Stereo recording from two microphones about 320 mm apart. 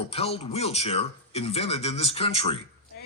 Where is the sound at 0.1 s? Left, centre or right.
Centre.